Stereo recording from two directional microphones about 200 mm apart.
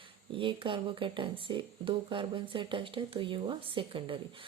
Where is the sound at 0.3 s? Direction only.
25° right (ahead or behind).